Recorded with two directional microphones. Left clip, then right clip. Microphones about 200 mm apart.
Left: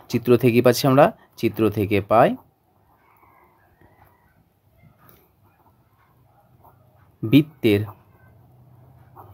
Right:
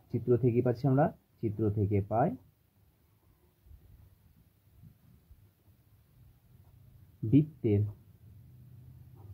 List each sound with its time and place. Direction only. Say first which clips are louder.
0.1 s speech: left 11 dB; 50° left (ahead or behind)
7.2 s speech: left 11 dB; 45° left (ahead or behind)